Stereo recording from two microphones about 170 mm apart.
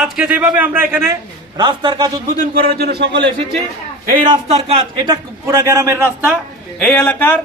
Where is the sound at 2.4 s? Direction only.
65° right (ahead or behind).